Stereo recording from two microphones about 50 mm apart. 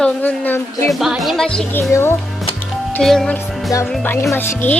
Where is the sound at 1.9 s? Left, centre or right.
Left.